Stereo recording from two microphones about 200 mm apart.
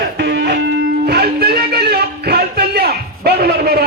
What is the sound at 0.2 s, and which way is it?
Music, 60° right (ahead or behind).